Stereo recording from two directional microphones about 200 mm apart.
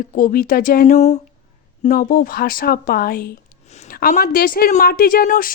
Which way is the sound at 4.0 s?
50° left (ahead or behind).